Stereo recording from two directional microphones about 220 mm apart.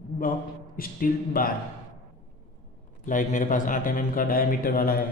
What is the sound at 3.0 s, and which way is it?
A man's voice, 35° left (ahead or behind).